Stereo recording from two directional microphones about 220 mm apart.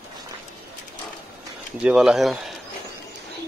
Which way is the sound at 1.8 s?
5° right (ahead or behind).